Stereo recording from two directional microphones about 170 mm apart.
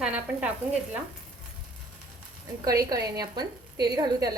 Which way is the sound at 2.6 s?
20° right (ahead or behind).